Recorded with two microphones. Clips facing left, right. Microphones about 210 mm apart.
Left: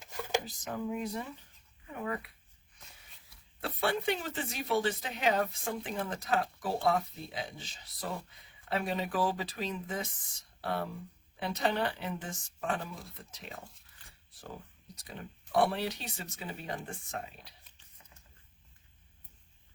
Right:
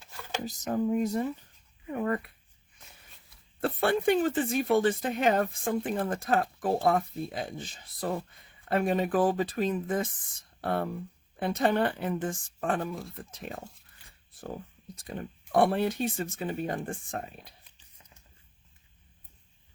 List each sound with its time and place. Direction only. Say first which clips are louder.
0.4 s speech: right 8 dB; 40° right (ahead or behind)
3.1 s hiccup: right 3 dB; centre (ahead or behind)
3.6 s speech: right 6 dB; 50° right (ahead or behind)
14.9 s speech: right 8 dB; 50° right (ahead or behind)